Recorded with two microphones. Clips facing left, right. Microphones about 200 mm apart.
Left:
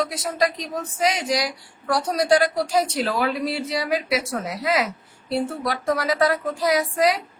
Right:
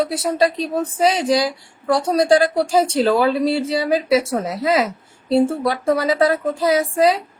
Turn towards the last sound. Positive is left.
turn(degrees=-25)  # may be behind; listen again after turning